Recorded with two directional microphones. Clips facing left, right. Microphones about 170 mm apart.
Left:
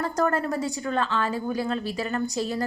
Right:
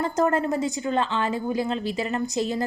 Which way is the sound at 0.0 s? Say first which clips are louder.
Right 2 dB; 20° right (ahead or behind).